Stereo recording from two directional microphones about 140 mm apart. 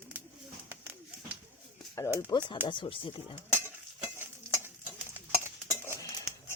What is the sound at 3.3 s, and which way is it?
Cutlery, 15° right (ahead or behind).